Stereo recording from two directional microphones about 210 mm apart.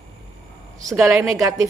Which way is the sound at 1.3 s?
15° right (ahead or behind).